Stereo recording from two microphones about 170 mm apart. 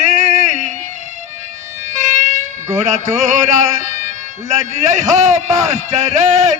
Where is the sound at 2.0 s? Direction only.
45° right (ahead or behind).